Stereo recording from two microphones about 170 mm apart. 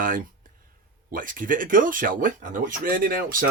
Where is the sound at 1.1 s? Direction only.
55° right (ahead or behind).